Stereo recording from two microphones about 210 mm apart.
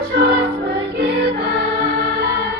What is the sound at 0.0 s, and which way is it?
Music, 50° right (ahead or behind).